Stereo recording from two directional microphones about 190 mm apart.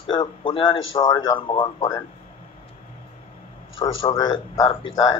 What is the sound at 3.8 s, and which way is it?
A man's voice, 20° left (ahead or behind).